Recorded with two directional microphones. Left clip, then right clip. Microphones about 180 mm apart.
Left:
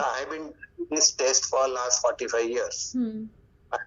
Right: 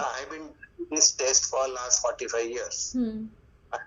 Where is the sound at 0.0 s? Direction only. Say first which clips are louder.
Left 4 dB; 30° left (ahead or behind).